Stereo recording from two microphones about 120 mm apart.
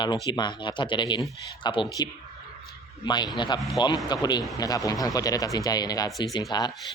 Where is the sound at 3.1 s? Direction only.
35° left (ahead or behind).